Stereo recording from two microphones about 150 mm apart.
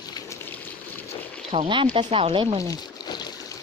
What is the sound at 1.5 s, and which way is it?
Speech, 45° right (ahead or behind).